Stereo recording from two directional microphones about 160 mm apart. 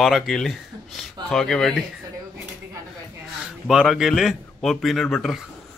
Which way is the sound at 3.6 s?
Centre (ahead or behind).